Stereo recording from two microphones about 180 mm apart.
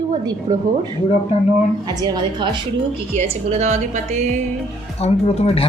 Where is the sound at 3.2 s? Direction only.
40° right (ahead or behind).